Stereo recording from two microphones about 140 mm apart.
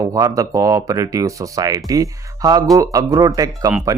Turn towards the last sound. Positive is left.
turn(degrees=-25)  # may be behind; listen again after turning